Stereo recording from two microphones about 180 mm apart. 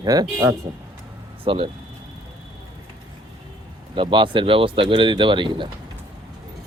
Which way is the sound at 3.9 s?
25° right (ahead or behind).